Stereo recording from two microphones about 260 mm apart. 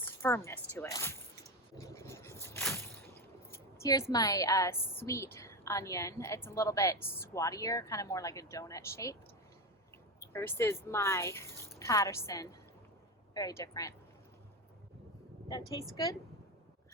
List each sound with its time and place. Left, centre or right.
0.0 s speech: centre
1.8 s a sound: centre
3.5 s a woman's voice: centre
10.2 s a woman's voice: centre
16.0 s a woman's voice: centre